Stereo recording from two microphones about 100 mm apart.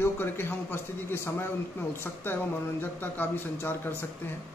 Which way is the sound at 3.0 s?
20° left (ahead or behind).